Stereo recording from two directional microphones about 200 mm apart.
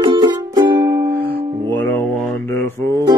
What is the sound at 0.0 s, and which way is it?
Music, 20° right (ahead or behind).